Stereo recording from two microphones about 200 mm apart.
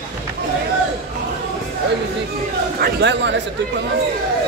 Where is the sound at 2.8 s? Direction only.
60° right (ahead or behind).